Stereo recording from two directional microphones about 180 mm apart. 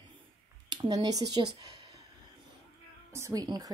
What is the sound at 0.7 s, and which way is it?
Speech, 20° right (ahead or behind).